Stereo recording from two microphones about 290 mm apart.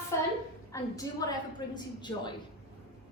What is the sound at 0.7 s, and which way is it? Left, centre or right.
Speech, centre.